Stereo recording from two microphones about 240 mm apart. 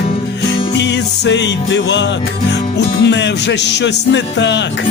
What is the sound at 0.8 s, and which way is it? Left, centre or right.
Music, left.